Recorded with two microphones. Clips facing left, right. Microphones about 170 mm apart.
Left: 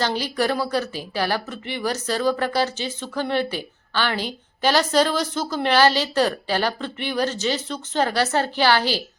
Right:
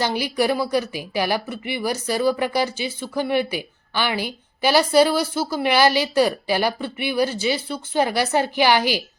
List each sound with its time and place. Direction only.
0.0 s a woman's voice: 10° right (ahead or behind)